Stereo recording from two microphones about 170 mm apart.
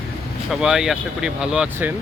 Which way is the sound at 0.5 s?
5° right (ahead or behind).